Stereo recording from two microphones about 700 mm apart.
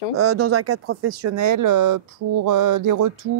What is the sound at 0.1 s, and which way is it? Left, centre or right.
Speech, centre.